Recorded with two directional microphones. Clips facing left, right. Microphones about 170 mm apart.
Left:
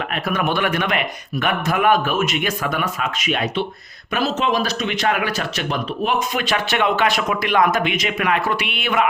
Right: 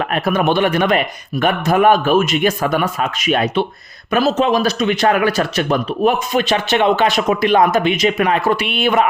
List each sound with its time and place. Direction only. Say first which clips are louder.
0.3 s speech: right 5 dB; 30° right (ahead or behind); by 6.2 s 45° right (ahead or behind)
6.3 s speech: right 5 dB; 25° right (ahead or behind)